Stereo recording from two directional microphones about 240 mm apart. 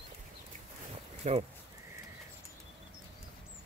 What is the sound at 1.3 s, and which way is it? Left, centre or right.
Speech, right.